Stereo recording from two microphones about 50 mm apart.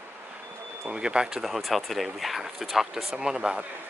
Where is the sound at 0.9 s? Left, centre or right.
Centre.